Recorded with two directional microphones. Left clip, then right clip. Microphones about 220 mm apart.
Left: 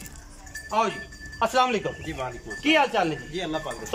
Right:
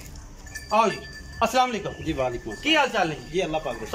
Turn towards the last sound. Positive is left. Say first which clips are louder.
# right 4 dB
turn(degrees=-10)  # may be behind; listen again after turning